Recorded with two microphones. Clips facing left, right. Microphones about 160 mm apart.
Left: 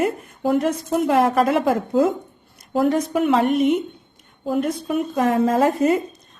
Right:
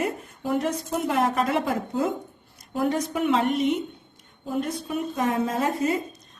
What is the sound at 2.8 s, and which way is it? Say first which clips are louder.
A woman's voice: left 4 dB; 50° left (ahead or behind).